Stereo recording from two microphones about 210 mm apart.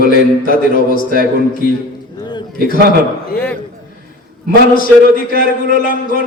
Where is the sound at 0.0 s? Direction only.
40° left (ahead or behind).